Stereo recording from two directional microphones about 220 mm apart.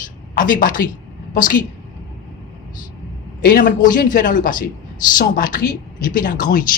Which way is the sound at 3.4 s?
40° left (ahead or behind).